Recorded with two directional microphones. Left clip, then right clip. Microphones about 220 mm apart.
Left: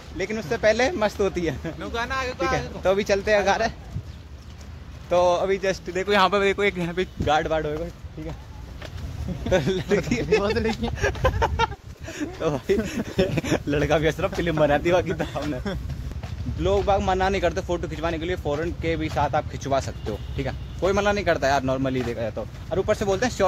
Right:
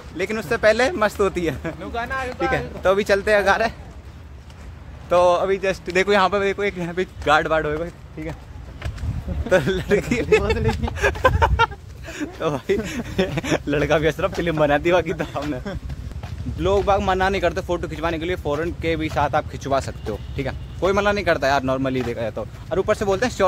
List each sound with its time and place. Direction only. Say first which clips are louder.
0.2 s speech: right 4 dB; 5° right (ahead or behind)
1.8 s speech: right 1 dB; 45° left (ahead or behind)
2.5 s speech: right 4 dB; centre (ahead or behind)
5.1 s speech: right 3 dB; centre (ahead or behind)
6.4 s speech: even; 10° left (ahead or behind)
6.9 s speech: right 4 dB; 5° right (ahead or behind)
9.5 s speech: right 4 dB; centre (ahead or behind)